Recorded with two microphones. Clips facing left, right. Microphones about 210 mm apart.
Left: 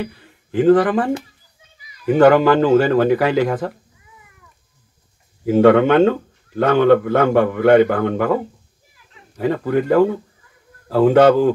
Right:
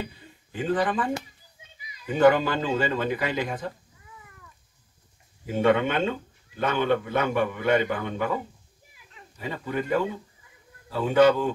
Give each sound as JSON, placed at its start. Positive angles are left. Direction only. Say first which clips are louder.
{"t": 0.0, "sound": "speech", "louder": "left 8 dB", "side_deg": 80}
{"t": 5.4, "sound": "speech", "louder": "left 10 dB", "side_deg": 85}